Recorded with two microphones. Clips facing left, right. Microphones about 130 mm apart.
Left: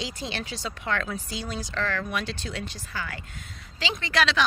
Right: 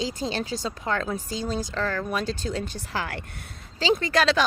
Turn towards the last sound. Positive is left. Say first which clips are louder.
# right 5 dB
turn(degrees=-40)  # may be behind; listen again after turning